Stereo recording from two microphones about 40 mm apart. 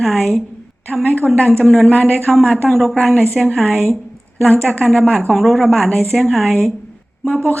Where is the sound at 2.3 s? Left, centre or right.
Centre.